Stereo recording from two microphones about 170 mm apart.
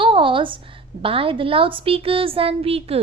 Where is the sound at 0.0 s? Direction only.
30° right (ahead or behind).